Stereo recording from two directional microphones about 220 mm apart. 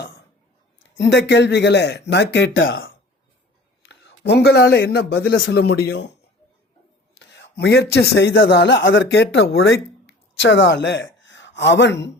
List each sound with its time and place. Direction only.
0.8 s a man's voice: 55° left (ahead or behind)
7.2 s a man's voice: 55° left (ahead or behind)